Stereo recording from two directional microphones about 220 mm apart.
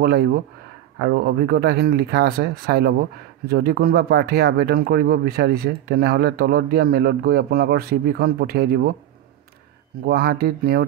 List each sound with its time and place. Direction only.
0.0 s speech: 45° right (ahead or behind)
10.0 s speech: 45° right (ahead or behind)